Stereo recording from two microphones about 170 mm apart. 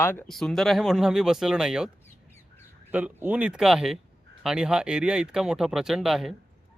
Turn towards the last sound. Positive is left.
turn(degrees=0)  # may be behind; listen again after turning